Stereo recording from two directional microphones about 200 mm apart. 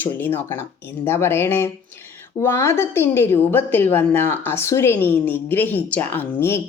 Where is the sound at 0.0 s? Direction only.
10° left (ahead or behind).